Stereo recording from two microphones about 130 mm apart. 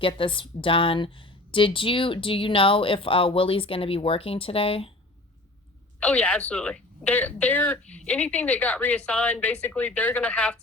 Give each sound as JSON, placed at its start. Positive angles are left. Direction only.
{"t": 0.2, "sound": "a woman's voice", "side_deg": 40}
{"t": 6.0, "sound": "a woman's voice", "side_deg": 10}